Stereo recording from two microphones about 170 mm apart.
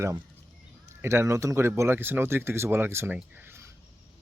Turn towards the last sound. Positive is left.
turn(degrees=-15)  # may be behind; listen again after turning